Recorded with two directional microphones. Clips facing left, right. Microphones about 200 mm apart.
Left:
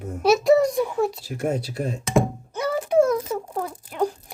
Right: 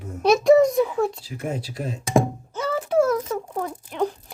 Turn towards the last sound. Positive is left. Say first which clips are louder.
# even
turn(degrees=10)  # may be behind; listen again after turning